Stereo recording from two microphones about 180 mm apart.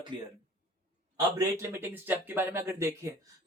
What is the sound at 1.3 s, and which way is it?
Speech, 15° right (ahead or behind).